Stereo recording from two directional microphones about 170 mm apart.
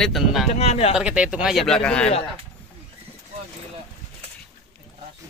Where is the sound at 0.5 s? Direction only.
35° left (ahead or behind).